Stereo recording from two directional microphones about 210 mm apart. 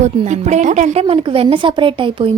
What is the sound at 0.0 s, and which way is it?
A woman's voice, 35° right (ahead or behind).